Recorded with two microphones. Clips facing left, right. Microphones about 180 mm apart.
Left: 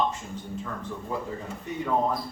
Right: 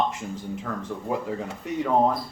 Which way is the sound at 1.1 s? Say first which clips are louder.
Right 4 dB; 75° right (ahead or behind).